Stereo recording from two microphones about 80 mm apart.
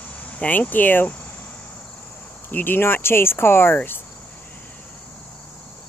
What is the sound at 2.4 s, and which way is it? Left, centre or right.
Speech, left.